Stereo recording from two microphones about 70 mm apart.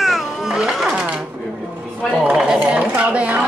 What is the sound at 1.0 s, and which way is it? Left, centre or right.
Speech, centre.